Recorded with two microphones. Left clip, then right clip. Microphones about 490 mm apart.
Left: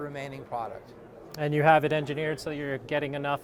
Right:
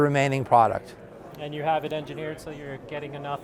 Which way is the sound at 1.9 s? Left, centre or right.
Left.